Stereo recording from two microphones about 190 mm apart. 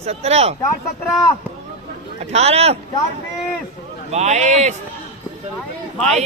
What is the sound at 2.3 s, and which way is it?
Speech, 35° right (ahead or behind).